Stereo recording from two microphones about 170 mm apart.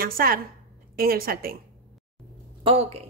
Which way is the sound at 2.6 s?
35° right (ahead or behind).